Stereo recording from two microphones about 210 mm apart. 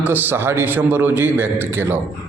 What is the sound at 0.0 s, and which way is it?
A man's voice, 10° right (ahead or behind).